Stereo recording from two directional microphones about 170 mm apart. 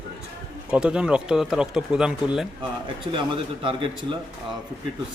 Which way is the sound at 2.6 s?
30° right (ahead or behind).